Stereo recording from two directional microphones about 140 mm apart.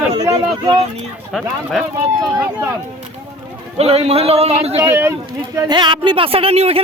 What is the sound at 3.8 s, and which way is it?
Speech, 45° right (ahead or behind).